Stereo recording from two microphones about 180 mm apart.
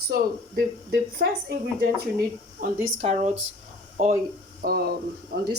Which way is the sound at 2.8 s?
45° right (ahead or behind).